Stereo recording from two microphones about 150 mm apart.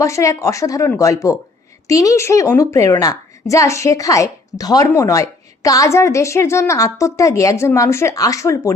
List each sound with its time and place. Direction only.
0.0 s a woman's voice: 20° left (ahead or behind)